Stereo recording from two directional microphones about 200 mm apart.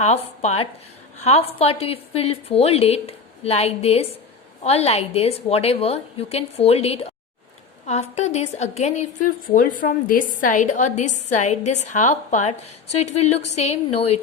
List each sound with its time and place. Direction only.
0.0 s a woman's voice: 35° left (ahead or behind)